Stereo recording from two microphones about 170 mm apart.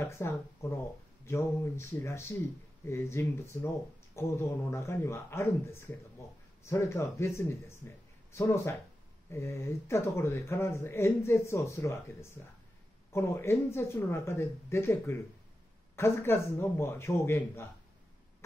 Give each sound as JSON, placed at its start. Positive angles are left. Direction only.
{"t": 0.0, "sound": "speech", "side_deg": 15}